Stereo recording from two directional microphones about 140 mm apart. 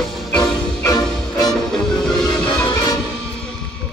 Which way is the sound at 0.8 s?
30° left (ahead or behind).